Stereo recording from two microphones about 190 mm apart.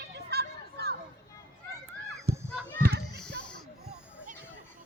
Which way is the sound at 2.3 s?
55° right (ahead or behind).